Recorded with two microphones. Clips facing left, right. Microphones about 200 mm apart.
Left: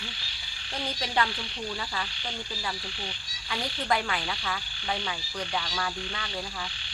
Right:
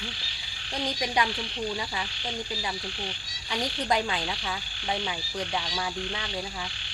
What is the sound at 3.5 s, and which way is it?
Insect, 20° right (ahead or behind).